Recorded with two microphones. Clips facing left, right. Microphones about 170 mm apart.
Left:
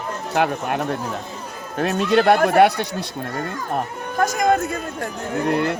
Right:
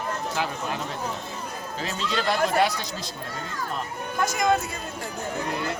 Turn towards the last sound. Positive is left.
turn(degrees=65)  # may be behind; listen again after turning